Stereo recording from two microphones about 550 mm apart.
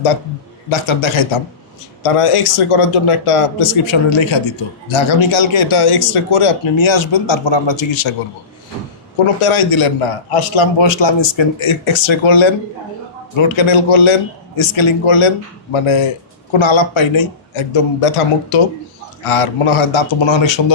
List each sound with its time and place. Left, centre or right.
0.7 s a man's voice: left
9.4 s a man's voice: left
19.2 s speech: left